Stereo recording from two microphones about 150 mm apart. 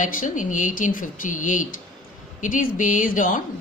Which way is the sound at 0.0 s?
60° left (ahead or behind).